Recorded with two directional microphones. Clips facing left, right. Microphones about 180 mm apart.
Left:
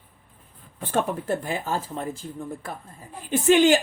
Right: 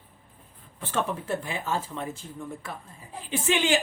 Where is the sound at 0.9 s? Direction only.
40° left (ahead or behind).